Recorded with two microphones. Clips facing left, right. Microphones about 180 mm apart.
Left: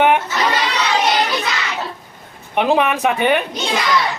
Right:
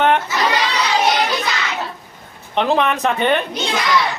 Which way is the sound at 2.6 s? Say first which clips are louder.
Left 1 dB; 10° left (ahead or behind).